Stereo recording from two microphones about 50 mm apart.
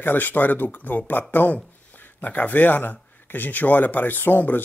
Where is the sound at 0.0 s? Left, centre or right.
Left.